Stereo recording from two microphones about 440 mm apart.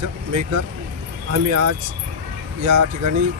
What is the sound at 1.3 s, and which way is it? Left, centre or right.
Speech, right.